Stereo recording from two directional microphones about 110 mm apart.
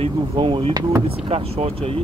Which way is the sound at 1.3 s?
65° right (ahead or behind).